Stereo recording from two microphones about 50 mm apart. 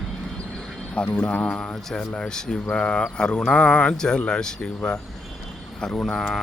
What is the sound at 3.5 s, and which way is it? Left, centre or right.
Mantra, left.